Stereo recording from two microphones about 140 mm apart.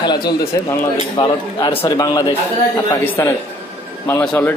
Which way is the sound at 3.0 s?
15° left (ahead or behind).